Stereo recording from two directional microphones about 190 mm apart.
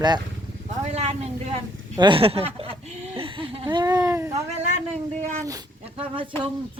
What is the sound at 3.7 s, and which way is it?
Speech, 20° right (ahead or behind).